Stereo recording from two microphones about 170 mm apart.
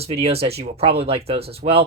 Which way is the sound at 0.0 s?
35° right (ahead or behind).